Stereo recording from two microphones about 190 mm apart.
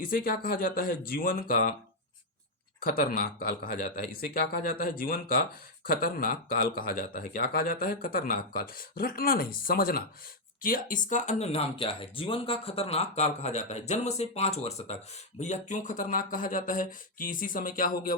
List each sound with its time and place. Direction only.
0.0 s speech: 50° left (ahead or behind)
2.8 s speech: 50° left (ahead or behind)